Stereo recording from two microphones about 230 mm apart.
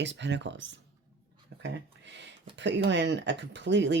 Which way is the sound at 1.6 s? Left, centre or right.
Right.